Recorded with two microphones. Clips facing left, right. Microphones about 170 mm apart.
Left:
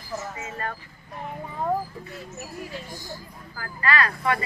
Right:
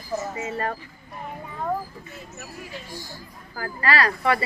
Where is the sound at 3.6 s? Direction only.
35° right (ahead or behind).